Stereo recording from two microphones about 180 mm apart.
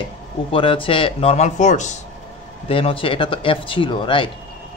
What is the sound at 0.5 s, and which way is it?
Speech, 30° left (ahead or behind).